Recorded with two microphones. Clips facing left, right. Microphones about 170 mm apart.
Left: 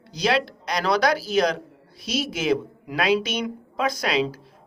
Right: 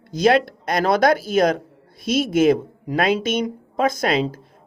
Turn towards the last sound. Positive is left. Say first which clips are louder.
# right 3 dB
turn(degrees=-50)  # may be behind; listen again after turning